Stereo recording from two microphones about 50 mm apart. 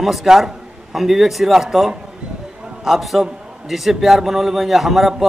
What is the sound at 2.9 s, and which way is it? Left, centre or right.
Speech, centre.